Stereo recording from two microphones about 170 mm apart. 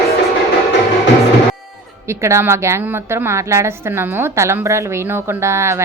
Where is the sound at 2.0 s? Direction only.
15° right (ahead or behind).